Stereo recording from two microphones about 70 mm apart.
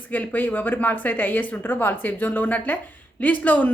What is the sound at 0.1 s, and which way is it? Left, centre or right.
A woman's voice, left.